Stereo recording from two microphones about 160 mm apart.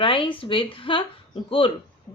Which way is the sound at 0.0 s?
35° left (ahead or behind).